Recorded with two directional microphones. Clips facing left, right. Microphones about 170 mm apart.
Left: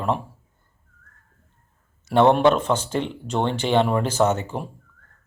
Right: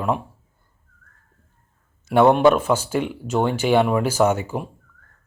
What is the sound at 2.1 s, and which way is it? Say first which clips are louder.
Speech: right 2 dB; 10° right (ahead or behind).